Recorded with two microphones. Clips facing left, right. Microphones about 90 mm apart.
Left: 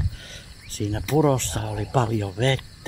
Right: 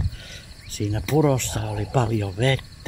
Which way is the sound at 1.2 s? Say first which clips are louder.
Even; 35° left (ahead or behind).